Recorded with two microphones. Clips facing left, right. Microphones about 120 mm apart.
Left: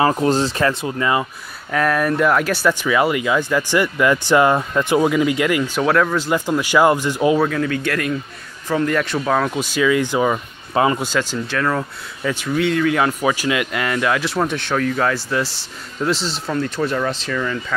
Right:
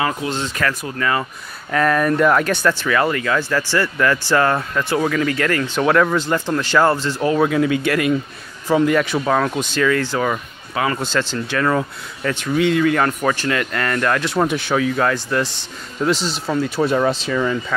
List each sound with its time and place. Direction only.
0.0 s speech: 35° left (ahead or behind)
0.6 s speech: 25° left (ahead or behind)
1.7 s speech: centre (ahead or behind)
5.8 s speech: centre (ahead or behind)
7.4 s speech: 10° right (ahead or behind); by 10.4 s 15° left (ahead or behind)
10.7 s speech: 30° left (ahead or behind)
11.0 s speech: 10° left (ahead or behind)
16.8 s speech: 15° right (ahead or behind)